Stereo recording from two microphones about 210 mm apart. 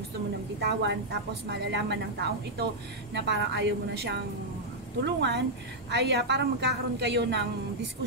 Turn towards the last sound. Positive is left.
turn(degrees=-55)  # may be behind; listen again after turning